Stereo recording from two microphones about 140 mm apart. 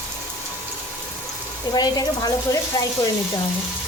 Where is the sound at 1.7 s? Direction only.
25° left (ahead or behind).